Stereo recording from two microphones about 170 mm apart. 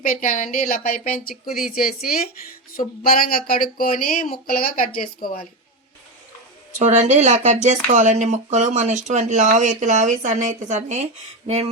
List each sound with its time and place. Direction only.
0.0 s speech: 50° left (ahead or behind)
6.7 s speech: 45° right (ahead or behind)